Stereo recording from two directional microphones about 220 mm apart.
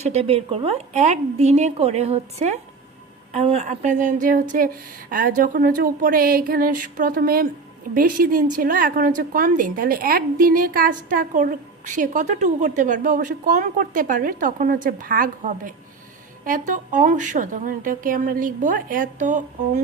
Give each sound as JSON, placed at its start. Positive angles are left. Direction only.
{"t": 0.0, "sound": "a woman's voice", "side_deg": -30}